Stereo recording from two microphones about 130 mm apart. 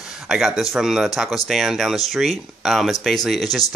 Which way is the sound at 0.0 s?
5° right (ahead or behind).